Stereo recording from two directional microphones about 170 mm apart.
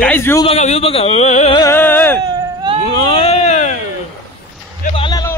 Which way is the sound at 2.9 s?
35° left (ahead or behind).